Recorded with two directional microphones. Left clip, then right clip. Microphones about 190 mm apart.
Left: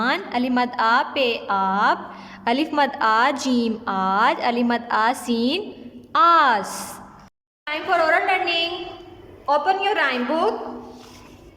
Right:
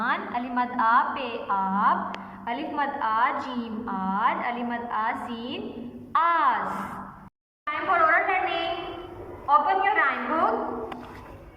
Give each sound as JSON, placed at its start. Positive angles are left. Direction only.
{"t": 0.0, "sound": "a woman's voice", "side_deg": 45}
{"t": 7.6, "sound": "a woman's voice", "side_deg": 50}
{"t": 9.5, "sound": "a woman's voice", "side_deg": 55}